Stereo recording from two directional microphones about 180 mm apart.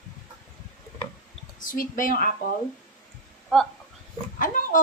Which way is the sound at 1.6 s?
50° left (ahead or behind).